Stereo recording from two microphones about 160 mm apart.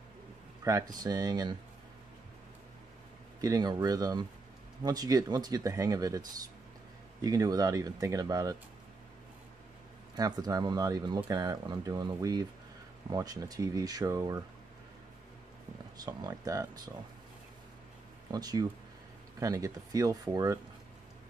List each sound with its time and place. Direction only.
0.7 s speech: 20° right (ahead or behind)
3.3 s speech: 20° right (ahead or behind)
10.1 s speech: 25° right (ahead or behind)
16.0 s speech: 25° right (ahead or behind)
18.3 s speech: 25° right (ahead or behind)